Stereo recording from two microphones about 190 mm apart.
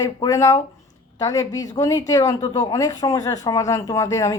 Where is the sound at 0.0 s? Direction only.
15° left (ahead or behind).